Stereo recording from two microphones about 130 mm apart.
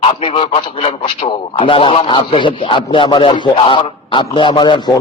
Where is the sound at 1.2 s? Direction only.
45° left (ahead or behind).